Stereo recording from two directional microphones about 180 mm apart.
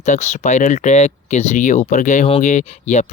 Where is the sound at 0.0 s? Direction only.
40° left (ahead or behind).